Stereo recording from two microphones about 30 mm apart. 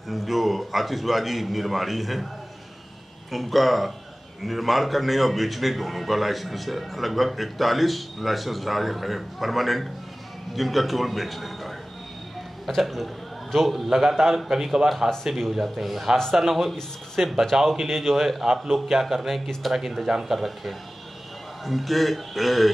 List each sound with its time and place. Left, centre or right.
0.1 s a man's voice: centre
3.3 s a man's voice: centre
15.6 s a man's voice: centre
18.4 s a man's voice: centre